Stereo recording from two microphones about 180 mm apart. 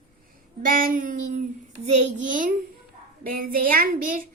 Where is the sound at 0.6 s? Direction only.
50° right (ahead or behind).